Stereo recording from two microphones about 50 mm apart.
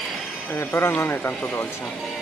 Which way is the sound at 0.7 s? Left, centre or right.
Left.